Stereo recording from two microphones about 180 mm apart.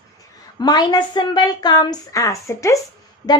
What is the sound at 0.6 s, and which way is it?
A woman's voice, 25° left (ahead or behind).